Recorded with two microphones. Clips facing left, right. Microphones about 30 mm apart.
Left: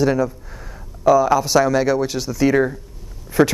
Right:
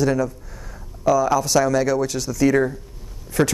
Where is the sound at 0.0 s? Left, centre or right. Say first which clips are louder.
Left 2 dB; centre.